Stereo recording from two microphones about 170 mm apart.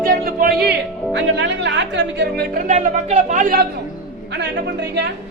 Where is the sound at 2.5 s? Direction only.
45° right (ahead or behind).